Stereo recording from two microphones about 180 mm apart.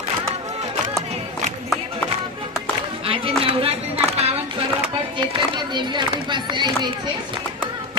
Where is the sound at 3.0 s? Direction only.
30° right (ahead or behind).